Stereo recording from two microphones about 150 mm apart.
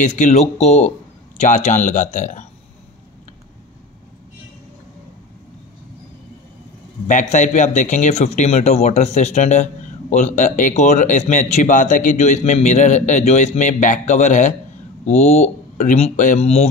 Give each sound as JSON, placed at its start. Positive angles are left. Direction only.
{"t": 0.0, "sound": "speech", "side_deg": 55}
{"t": 7.1, "sound": "speech", "side_deg": 55}
{"t": 16.3, "sound": "speech", "side_deg": 40}